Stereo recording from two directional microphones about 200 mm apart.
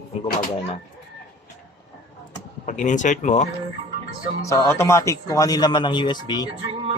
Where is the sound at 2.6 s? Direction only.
40° left (ahead or behind).